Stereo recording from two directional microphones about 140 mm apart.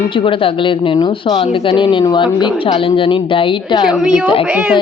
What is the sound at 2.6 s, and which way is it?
Speech, 45° left (ahead or behind).